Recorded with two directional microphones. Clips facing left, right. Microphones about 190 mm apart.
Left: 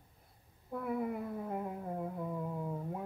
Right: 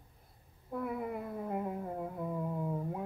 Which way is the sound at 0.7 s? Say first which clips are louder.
Left 1 dB; 5° right (ahead or behind).